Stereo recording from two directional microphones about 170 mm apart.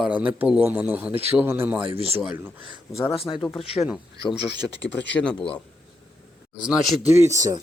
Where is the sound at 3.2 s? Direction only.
30° left (ahead or behind).